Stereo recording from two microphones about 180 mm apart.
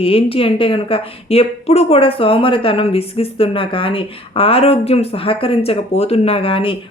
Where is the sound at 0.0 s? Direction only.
30° left (ahead or behind).